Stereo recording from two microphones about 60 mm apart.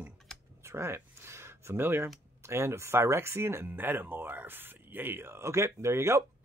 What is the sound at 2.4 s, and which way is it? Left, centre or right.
Speech, right.